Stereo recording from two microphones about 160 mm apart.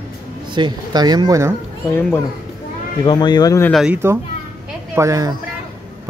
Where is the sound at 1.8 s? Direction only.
15° left (ahead or behind).